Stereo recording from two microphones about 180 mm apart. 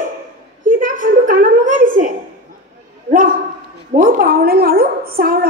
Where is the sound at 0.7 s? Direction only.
50° right (ahead or behind).